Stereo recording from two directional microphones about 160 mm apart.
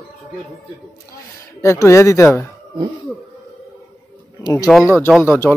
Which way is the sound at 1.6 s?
15° left (ahead or behind).